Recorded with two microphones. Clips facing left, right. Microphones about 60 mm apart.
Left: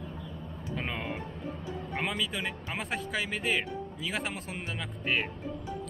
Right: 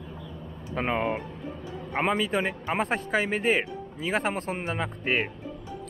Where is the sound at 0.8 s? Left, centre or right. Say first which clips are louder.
Right 9 dB; right.